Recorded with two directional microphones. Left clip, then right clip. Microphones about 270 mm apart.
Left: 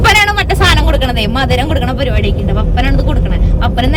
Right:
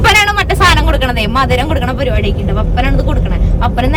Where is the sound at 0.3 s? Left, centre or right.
Centre.